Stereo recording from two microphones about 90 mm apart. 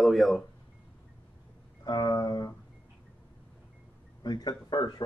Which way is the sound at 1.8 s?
50° left (ahead or behind).